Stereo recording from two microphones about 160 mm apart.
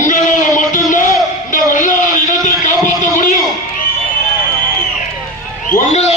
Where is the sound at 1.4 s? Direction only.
55° left (ahead or behind).